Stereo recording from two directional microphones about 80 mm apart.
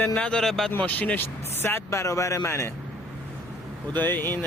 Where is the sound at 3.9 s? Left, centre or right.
Left.